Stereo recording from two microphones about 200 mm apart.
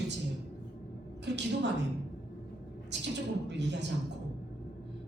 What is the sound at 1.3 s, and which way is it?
Speech, 60° right (ahead or behind).